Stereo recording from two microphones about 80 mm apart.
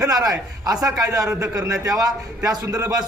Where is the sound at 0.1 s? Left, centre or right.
Right.